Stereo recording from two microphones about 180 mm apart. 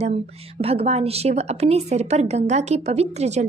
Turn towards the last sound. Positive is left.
turn(degrees=-40)  # may be behind; listen again after turning